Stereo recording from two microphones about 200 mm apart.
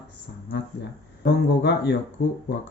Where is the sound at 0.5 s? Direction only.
60° left (ahead or behind).